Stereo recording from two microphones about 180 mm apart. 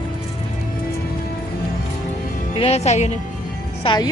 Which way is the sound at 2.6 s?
35° left (ahead or behind).